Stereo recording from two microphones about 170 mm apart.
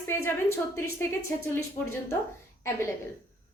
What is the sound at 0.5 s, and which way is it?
Speech, 15° left (ahead or behind).